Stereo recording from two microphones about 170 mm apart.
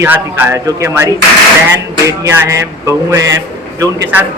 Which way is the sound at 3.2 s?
90° right.